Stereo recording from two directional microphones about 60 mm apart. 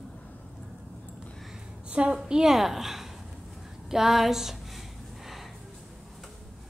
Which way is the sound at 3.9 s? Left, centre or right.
Centre.